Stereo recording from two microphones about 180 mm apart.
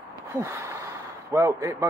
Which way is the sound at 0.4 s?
15° right (ahead or behind).